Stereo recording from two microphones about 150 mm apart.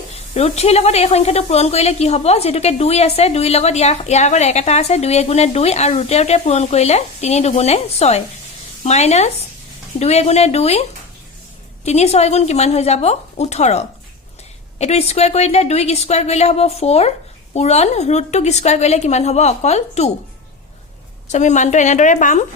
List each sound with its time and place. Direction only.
0.3 s a woman's voice: 45° left (ahead or behind)
11.9 s a woman's voice: 45° left (ahead or behind)
21.3 s a woman's voice: 50° left (ahead or behind)